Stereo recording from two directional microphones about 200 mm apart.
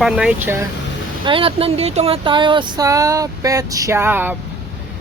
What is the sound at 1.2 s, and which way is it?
Speech, 25° right (ahead or behind).